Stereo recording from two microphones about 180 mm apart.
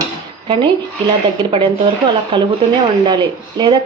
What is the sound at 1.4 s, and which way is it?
Speech, 25° right (ahead or behind).